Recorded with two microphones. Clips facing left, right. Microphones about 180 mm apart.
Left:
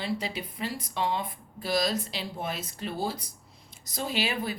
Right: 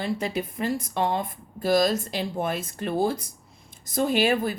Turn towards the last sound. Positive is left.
turn(degrees=-50)  # may be behind; listen again after turning